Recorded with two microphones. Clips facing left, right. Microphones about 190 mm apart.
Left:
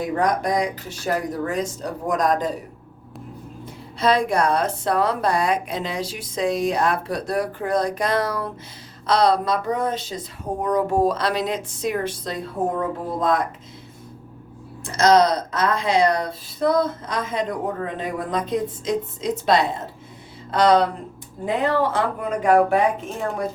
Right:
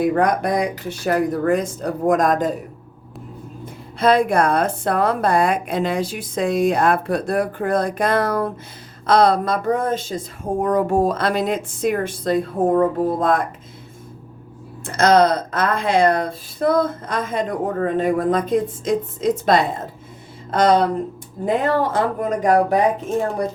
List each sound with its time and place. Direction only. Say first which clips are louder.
0.0 s speech: right 4 dB; 60° right (ahead or behind)
4.0 s a woman's voice: right 3 dB; 55° right (ahead or behind)
14.8 s a woman's voice: right 2 dB; 55° right (ahead or behind)